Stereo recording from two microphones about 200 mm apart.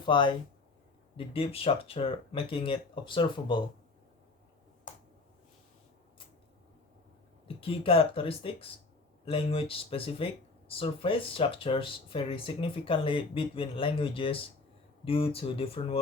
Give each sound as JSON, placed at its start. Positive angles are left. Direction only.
{"t": 0.0, "sound": "speech", "side_deg": 25}
{"t": 7.4, "sound": "speech", "side_deg": 30}